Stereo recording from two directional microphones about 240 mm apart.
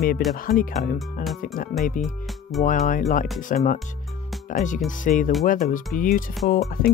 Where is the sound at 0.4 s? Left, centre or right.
Left.